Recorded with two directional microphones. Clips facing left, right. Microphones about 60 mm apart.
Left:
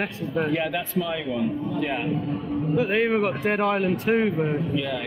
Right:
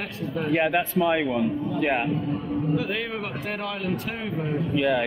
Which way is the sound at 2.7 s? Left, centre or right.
Left.